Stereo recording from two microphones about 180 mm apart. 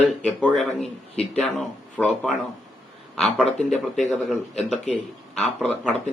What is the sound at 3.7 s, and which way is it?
Speech, centre (ahead or behind).